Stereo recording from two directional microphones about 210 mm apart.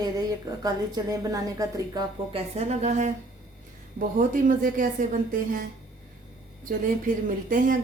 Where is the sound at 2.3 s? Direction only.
30° right (ahead or behind).